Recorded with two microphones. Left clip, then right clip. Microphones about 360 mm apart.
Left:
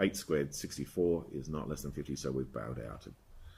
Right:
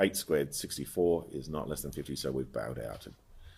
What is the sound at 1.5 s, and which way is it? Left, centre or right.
Speech, centre.